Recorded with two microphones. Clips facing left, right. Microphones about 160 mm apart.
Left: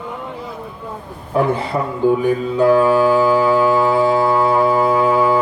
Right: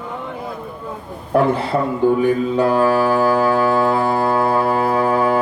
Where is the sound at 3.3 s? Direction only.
60° right (ahead or behind).